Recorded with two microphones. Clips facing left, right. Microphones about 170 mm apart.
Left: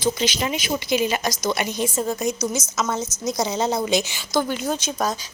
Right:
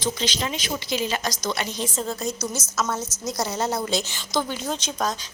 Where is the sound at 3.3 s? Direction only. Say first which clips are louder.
Left 3 dB; 15° left (ahead or behind).